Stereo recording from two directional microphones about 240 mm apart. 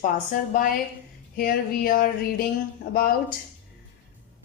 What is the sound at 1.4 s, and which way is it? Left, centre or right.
Speech, left.